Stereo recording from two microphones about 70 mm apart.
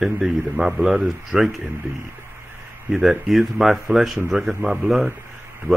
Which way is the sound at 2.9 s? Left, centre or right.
Centre.